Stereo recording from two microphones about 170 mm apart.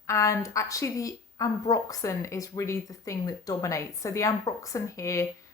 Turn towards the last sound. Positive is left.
turn(degrees=20)  # may be behind; listen again after turning